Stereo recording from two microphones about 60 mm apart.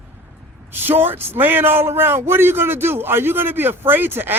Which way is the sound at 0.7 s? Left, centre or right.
Right.